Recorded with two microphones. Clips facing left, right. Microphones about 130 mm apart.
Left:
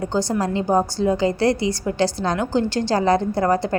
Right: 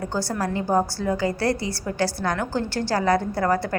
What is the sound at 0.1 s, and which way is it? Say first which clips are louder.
A woman's voice: left 4 dB; 20° left (ahead or behind).